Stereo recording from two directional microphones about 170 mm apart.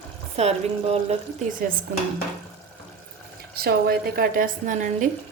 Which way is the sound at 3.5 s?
65° right (ahead or behind).